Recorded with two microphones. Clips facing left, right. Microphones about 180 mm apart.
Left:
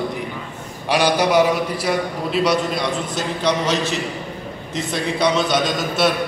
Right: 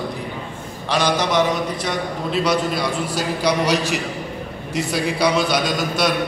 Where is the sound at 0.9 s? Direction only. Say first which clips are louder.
Left 3 dB; 10° left (ahead or behind).